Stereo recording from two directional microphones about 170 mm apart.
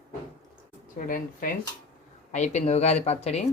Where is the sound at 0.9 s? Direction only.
55° left (ahead or behind).